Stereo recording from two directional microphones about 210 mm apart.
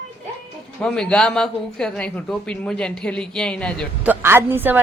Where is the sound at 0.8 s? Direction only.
5° left (ahead or behind).